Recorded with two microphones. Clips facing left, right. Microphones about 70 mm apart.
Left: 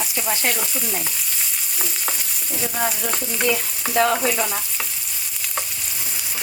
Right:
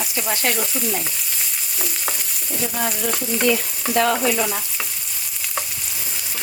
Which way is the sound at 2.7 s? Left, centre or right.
Centre.